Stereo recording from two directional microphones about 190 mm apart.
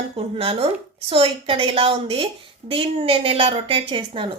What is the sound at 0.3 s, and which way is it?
A woman's voice, 30° right (ahead or behind).